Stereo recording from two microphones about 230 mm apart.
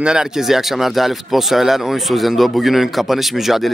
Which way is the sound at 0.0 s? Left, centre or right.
Centre.